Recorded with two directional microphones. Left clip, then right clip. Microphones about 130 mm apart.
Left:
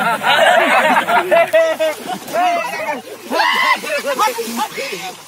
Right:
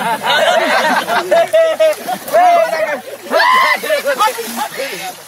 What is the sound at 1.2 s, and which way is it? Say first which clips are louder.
Speech: right 1 dB; 30° right (ahead or behind).